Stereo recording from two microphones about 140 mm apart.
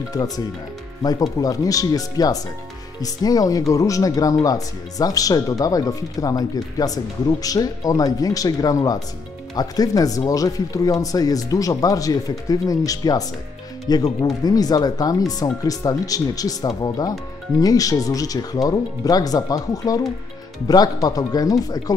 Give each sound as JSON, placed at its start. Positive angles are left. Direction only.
{"t": 0.1, "sound": "speech", "side_deg": 30}